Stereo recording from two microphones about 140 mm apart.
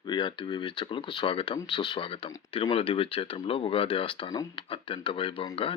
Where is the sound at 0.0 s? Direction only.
30° left (ahead or behind).